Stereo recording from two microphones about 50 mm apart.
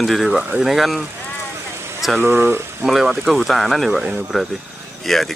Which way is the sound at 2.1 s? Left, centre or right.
Right.